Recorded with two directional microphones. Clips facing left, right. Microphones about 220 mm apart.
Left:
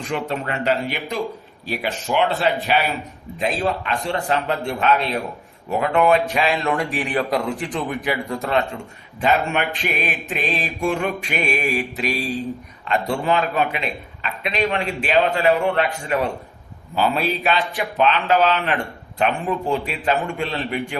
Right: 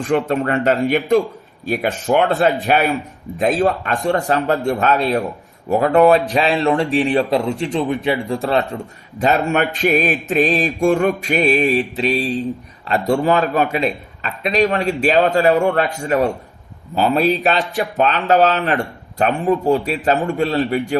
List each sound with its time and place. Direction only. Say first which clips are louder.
0.1 s a man's voice: right 8 dB; 50° right (ahead or behind)